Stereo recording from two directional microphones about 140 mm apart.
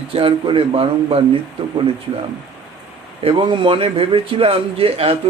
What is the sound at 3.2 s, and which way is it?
A man's voice, 40° right (ahead or behind).